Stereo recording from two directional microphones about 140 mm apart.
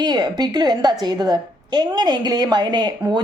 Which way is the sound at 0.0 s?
30° right (ahead or behind).